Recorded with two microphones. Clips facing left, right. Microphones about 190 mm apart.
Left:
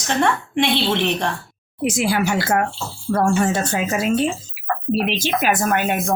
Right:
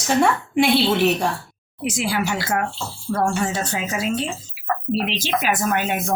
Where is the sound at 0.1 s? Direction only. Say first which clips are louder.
Right 1 dB; 5° right (ahead or behind).